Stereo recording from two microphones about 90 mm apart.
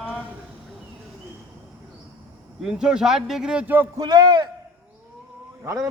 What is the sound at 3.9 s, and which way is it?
Speech, 50° right (ahead or behind).